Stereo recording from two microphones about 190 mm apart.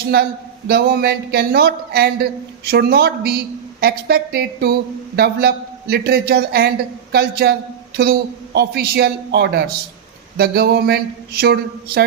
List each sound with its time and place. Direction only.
0.7 s a woman's voice: 55° right (ahead or behind)